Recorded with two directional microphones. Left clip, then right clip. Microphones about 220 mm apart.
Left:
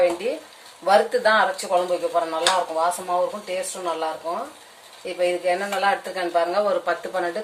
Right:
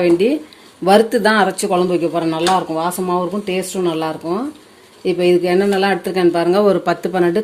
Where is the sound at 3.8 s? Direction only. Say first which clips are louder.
Right 9 dB; 55° right (ahead or behind).